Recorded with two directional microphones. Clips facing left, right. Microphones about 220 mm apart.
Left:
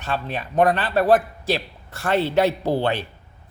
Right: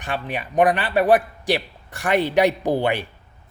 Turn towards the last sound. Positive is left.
turn(degrees=-15)  # may be behind; listen again after turning